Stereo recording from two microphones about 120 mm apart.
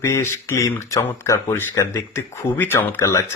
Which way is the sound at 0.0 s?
25° left (ahead or behind).